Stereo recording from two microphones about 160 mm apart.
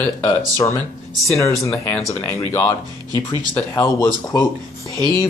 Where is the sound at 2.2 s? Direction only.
15° left (ahead or behind).